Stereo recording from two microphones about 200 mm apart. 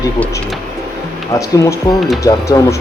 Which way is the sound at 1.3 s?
15° left (ahead or behind).